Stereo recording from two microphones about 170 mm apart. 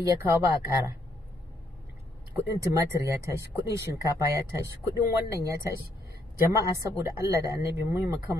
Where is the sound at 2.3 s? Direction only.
20° right (ahead or behind).